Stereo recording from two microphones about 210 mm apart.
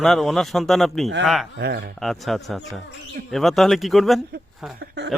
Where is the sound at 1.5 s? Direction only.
55° right (ahead or behind).